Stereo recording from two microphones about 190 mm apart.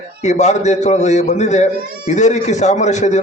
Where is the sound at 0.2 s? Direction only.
35° left (ahead or behind).